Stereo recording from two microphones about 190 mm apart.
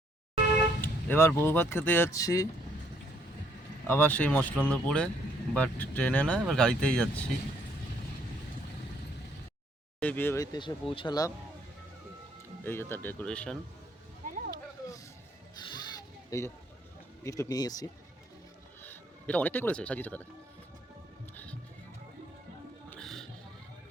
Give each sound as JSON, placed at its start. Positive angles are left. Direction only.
{"t": 0.8, "sound": "vehicle", "side_deg": 10}
{"t": 1.5, "sound": "speech", "side_deg": 10}
{"t": 3.8, "sound": "speech", "side_deg": 10}
{"t": 10.0, "sound": "speech", "side_deg": 10}
{"t": 12.6, "sound": "speech", "side_deg": 10}
{"t": 14.3, "sound": "a sound", "side_deg": -45}
{"t": 14.5, "sound": "a sound", "side_deg": 20}
{"t": 17.2, "sound": "speech", "side_deg": 15}
{"t": 18.8, "sound": "speech", "side_deg": 10}
{"t": 21.3, "sound": "music", "side_deg": 5}
{"t": 22.9, "sound": "music", "side_deg": 5}